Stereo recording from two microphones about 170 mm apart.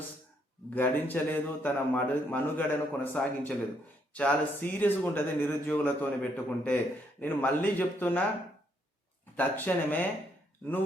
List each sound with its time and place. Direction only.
0.7 s a man's voice: 10° left (ahead or behind)
9.3 s a man's voice: 10° left (ahead or behind)